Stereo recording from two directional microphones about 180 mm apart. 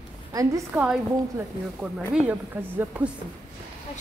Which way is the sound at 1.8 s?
5° right (ahead or behind).